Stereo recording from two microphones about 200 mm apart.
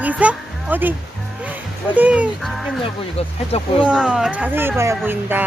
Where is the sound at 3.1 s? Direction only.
30° left (ahead or behind).